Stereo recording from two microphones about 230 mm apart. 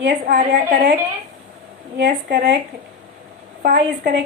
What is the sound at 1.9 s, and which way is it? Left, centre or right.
Speech, right.